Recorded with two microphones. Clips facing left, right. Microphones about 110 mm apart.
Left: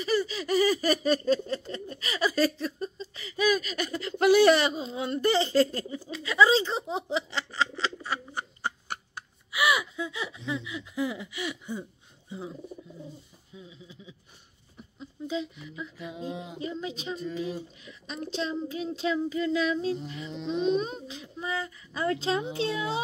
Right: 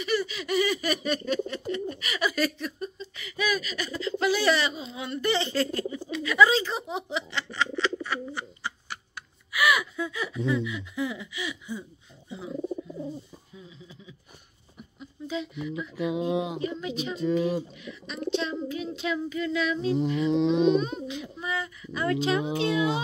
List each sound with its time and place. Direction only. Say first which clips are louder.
0.0 s speech: left 1 dB; 30° left (ahead or behind); by 9.0 s 50° left (ahead or behind)
9.5 s gasp: right 1 dB; 25° left (ahead or behind); by 11.8 s 50° left (ahead or behind)
12.3 s a sound: right 1 dB; 35° left (ahead or behind)
15.0 s a sound: left 1 dB; 30° left (ahead or behind)
16.0 s music: right 11 dB; 85° right
16.6 s speech: right 4 dB; 30° left (ahead or behind)
17.1 s speech: right 8 dB; 90° right
17.7 s speech: right 2 dB; 35° left (ahead or behind)
20.0 s music: right 14 dB; 90° right
20.8 s speech: right 4 dB; 35° left (ahead or behind)
22.4 s speech: right 5 dB; 90° right